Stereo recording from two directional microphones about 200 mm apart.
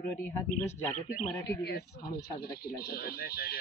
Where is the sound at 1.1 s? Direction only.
50° left (ahead or behind).